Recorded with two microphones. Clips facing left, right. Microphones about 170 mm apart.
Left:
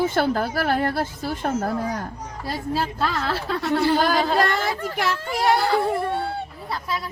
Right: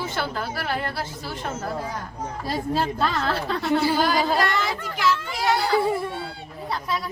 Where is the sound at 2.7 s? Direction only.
Centre (ahead or behind).